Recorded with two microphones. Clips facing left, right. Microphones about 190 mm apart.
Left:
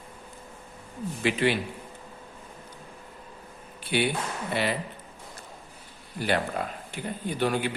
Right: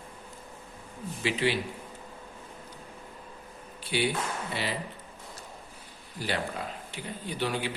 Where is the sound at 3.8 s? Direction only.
55° left (ahead or behind).